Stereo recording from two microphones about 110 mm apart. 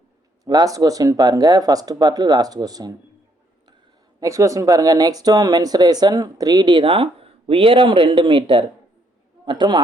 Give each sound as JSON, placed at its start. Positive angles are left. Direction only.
{"t": 0.4, "sound": "speech", "side_deg": -35}
{"t": 4.2, "sound": "a man's voice", "side_deg": -30}